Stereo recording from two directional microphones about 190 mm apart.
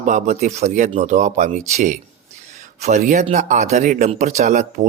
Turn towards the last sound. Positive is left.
turn(degrees=-40)  # may be behind; listen again after turning